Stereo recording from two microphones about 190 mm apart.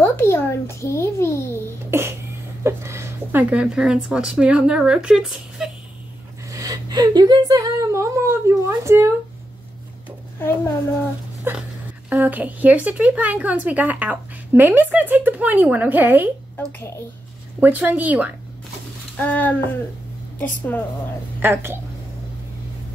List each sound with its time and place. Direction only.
0.0 s a child's voice: 10° left (ahead or behind)
1.9 s cough: 15° right (ahead or behind)
2.6 s speech: 15° right (ahead or behind)
6.5 s speech: 20° right (ahead or behind)
10.4 s a child's voice: 10° left (ahead or behind)
11.5 s speech: 10° right (ahead or behind)
16.5 s a child's voice: 15° left (ahead or behind)
17.6 s speech: 10° right (ahead or behind)
19.1 s a child's voice: 10° left (ahead or behind)
21.4 s speech: 10° right (ahead or behind)